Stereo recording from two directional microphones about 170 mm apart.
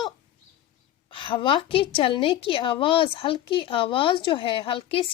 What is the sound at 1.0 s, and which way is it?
A woman's voice, 30° left (ahead or behind).